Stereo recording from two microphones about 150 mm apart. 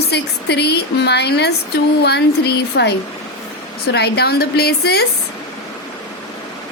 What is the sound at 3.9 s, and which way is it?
A woman's voice, 90° left.